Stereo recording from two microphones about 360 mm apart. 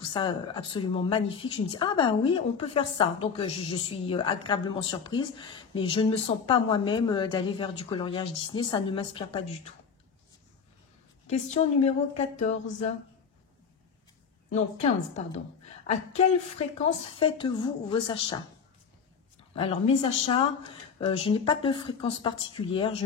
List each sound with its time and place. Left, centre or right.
0.0 s a woman's voice: centre
11.4 s a woman's voice: centre
14.5 s a woman's voice: centre
19.5 s a woman's voice: centre